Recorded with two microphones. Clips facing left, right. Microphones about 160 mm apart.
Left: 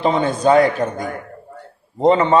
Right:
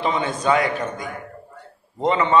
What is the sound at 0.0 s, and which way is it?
A man's voice, 35° left (ahead or behind).